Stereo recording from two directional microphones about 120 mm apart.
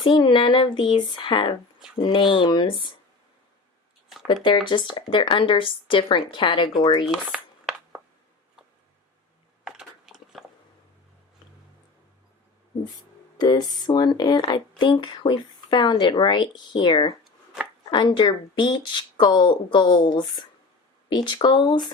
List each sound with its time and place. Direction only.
0.0 s speech: 45° left (ahead or behind)
4.4 s speech: 45° left (ahead or behind)
7.0 s a sound: 5° right (ahead or behind)
9.6 s biting: 5° right (ahead or behind)
13.4 s speech: 35° left (ahead or behind)
17.2 s a sound: 5° right (ahead or behind)
17.9 s speech: 40° left (ahead or behind)